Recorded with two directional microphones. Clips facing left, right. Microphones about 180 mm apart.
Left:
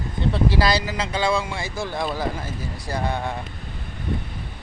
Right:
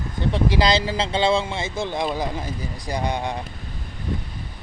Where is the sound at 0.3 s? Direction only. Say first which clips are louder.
Right 1 dB; 20° right (ahead or behind).